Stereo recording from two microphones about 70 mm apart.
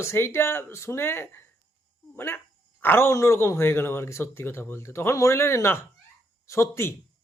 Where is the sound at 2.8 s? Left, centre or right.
Left.